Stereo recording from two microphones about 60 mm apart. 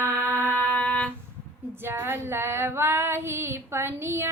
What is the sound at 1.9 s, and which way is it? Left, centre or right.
Female singing, right.